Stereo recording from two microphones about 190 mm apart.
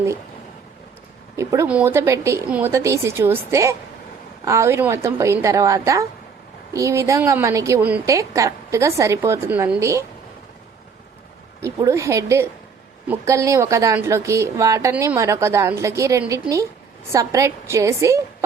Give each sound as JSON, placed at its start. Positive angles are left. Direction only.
{"t": 1.4, "sound": "a woman's voice", "side_deg": -15}
{"t": 11.6, "sound": "a woman's voice", "side_deg": -15}